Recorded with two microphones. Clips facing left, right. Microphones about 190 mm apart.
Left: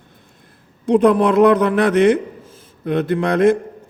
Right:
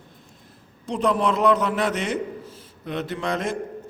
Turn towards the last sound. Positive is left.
turn(degrees=60)  # may be behind; listen again after turning